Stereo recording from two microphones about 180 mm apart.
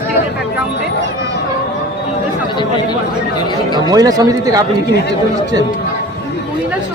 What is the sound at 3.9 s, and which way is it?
Speech, 20° right (ahead or behind).